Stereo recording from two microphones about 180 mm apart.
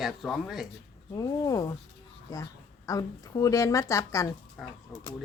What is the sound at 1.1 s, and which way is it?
A woman's voice, 20° left (ahead or behind).